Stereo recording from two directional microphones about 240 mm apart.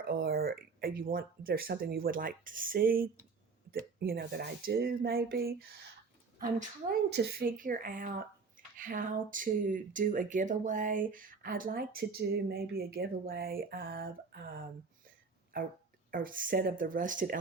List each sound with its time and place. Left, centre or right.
0.0 s speech: right
7.1 s speech: right